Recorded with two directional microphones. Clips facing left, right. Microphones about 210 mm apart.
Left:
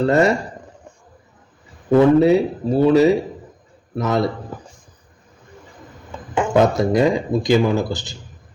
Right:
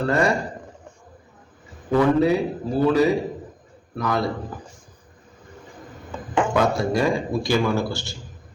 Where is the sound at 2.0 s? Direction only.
25° left (ahead or behind).